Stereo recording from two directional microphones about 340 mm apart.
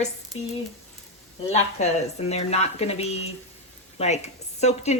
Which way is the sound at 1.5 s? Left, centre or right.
Centre.